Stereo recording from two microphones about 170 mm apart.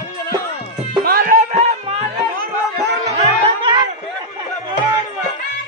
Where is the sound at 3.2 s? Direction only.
30° right (ahead or behind).